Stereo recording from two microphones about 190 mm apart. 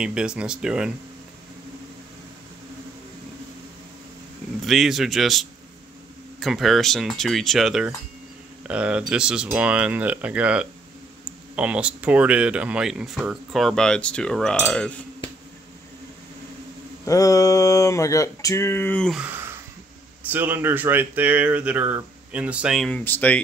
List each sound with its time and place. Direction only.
0.0 s speech: 5° right (ahead or behind)
4.6 s speech: centre (ahead or behind)
17.0 s speech: 15° left (ahead or behind)